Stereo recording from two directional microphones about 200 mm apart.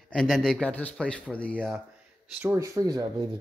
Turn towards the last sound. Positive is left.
turn(degrees=-20)  # may be behind; listen again after turning